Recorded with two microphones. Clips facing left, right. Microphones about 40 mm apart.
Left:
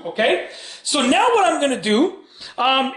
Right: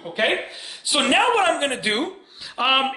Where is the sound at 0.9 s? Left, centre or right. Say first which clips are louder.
Left 2 dB; centre.